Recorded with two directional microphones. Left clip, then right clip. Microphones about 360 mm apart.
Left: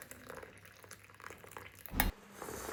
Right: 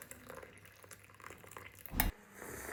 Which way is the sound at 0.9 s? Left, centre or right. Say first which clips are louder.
Left 2 dB; centre.